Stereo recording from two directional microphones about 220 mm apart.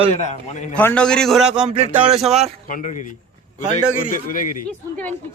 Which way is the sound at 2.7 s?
35° left (ahead or behind).